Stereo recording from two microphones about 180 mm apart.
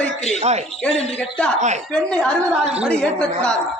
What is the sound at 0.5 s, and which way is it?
Speech, 35° right (ahead or behind).